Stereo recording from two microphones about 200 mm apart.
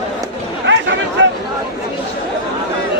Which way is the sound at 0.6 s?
65° right (ahead or behind).